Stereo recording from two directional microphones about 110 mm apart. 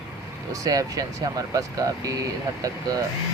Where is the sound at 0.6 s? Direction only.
30° right (ahead or behind).